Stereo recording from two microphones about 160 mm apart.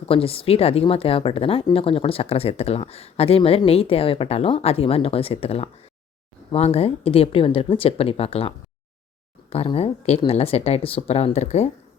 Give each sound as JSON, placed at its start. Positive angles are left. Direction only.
{"t": 0.1, "sound": "speech", "side_deg": 35}